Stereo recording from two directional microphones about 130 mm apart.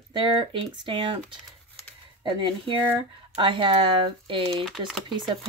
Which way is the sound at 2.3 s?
40° right (ahead or behind).